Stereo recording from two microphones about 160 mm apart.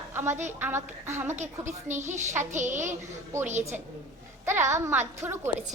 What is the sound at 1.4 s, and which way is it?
Speech, 50° right (ahead or behind).